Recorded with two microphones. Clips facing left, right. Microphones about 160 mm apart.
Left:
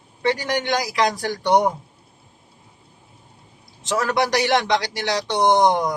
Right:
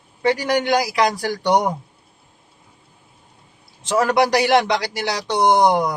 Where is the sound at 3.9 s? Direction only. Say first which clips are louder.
Right 4 dB; 10° right (ahead or behind).